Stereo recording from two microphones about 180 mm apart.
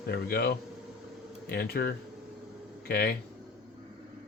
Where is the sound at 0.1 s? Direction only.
60° left (ahead or behind).